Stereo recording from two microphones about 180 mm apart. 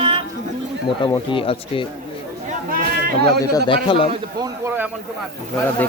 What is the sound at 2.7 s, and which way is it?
Speech, 55° right (ahead or behind).